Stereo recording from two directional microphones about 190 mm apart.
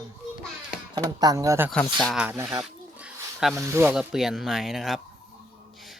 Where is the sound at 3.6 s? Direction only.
10° right (ahead or behind).